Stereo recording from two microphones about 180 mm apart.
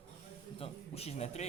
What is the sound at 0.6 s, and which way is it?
Speech, 35° left (ahead or behind).